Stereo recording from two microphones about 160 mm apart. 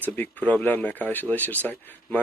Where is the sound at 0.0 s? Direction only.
10° left (ahead or behind).